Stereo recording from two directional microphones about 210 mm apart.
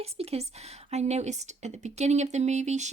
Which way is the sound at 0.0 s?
30° right (ahead or behind).